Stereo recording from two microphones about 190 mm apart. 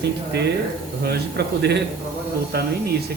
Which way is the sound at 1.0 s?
60° right (ahead or behind).